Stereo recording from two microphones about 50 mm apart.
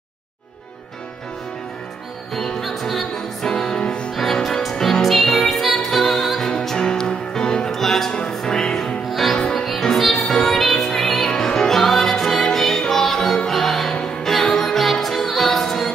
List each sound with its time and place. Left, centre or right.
2.3 s music: centre; by 4.1 s left
4.1 s music: centre
8.1 s music: centre
9.1 s music: centre
13.9 s music: centre